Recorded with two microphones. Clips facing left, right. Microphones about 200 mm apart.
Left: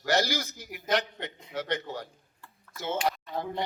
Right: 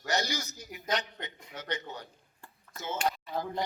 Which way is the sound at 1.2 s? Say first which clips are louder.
Left 7 dB; 75° left (ahead or behind).